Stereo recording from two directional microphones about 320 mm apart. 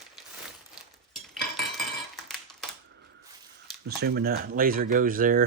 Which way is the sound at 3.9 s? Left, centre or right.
Right.